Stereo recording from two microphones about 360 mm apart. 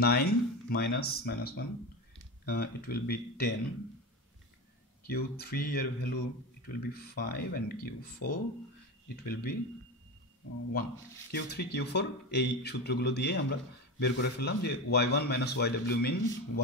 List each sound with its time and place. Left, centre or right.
0.0 s speech: left
5.0 s speech: left
11.3 s speech: left